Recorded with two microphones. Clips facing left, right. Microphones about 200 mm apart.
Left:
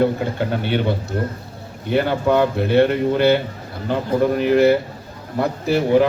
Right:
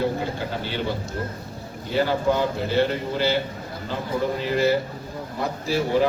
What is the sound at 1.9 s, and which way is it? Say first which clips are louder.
A man's voice: left 4 dB; 60° left (ahead or behind).